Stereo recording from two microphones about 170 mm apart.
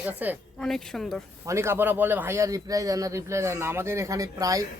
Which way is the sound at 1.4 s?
15° right (ahead or behind).